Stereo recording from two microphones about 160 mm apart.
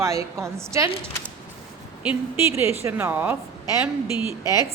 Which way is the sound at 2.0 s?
10° right (ahead or behind).